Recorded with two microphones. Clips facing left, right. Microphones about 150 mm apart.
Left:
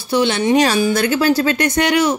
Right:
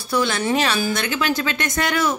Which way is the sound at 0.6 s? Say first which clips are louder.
Left 7 dB; 35° left (ahead or behind).